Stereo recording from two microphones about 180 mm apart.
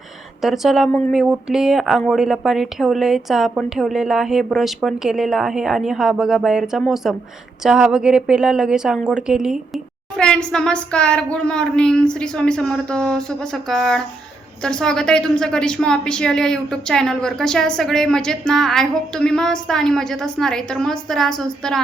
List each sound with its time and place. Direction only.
0.4 s a woman's voice: centre (ahead or behind)